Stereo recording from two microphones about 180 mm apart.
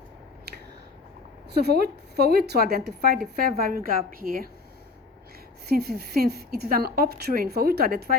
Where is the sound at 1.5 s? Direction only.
65° right (ahead or behind).